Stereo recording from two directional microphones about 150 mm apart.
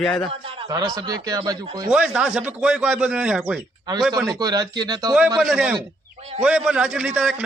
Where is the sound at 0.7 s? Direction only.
25° right (ahead or behind).